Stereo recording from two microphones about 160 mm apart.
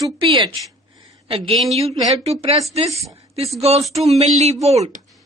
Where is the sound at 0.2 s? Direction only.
30° right (ahead or behind).